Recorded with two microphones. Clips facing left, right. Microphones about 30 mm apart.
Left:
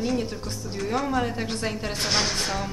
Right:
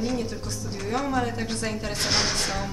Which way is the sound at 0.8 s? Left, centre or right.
Centre.